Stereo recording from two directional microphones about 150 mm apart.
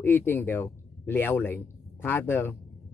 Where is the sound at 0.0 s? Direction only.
15° left (ahead or behind).